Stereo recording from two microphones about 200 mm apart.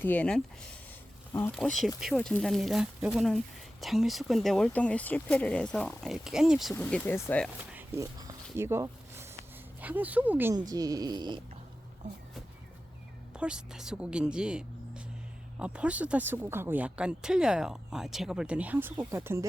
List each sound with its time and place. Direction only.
0.0 s speech: 5° left (ahead or behind)
1.5 s speech: centre (ahead or behind)
7.7 s a sound: 10° right (ahead or behind)
9.8 s speech: 10° right (ahead or behind)
13.3 s speech: 5° right (ahead or behind)